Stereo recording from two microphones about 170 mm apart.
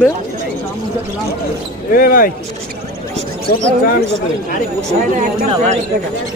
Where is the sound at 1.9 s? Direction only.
60° left (ahead or behind).